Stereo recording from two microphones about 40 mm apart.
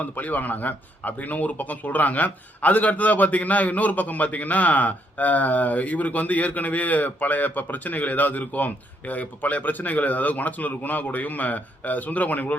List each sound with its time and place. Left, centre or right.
0.0 s speech: left